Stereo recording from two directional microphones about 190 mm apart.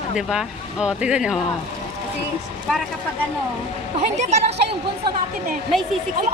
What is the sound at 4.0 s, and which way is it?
Speech, 35° right (ahead or behind).